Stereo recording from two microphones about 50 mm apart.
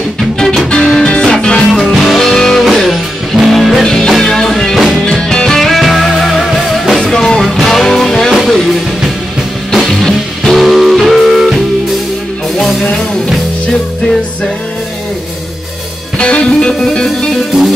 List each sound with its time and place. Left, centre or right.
0.7 s music: centre
1.8 s music: centre
2.1 s music: centre
2.6 s music: centre
3.8 s music: centre
4.7 s music: centre
5.0 s music: centre
16.2 s music: left